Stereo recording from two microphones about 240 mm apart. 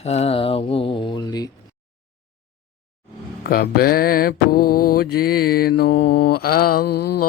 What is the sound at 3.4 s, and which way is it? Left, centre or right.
Mantra, left.